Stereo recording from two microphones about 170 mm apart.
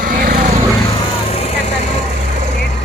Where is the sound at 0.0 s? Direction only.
60° right (ahead or behind).